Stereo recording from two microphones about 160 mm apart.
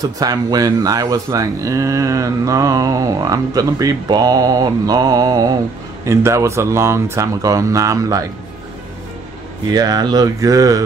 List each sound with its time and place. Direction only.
0.0 s speech: 25° right (ahead or behind)
9.7 s speech: 25° right (ahead or behind)